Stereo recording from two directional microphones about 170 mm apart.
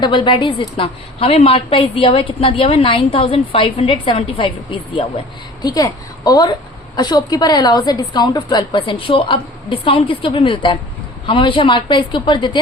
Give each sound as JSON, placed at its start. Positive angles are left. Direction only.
{"t": 0.0, "sound": "a woman's voice", "side_deg": 25}
{"t": 5.6, "sound": "a woman's voice", "side_deg": 20}